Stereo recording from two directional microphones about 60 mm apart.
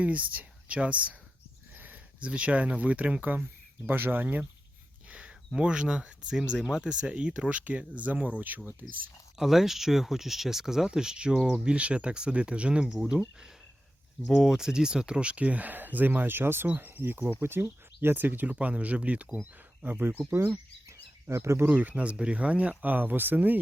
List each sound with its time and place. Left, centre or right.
0.0 s speech: right
5.0 s a sound: right
5.5 s speech: centre; by 9.0 s right
9.4 s speech: centre; by 19.3 s right
19.8 s speech: right
21.2 s speech: right
21.7 s speech: right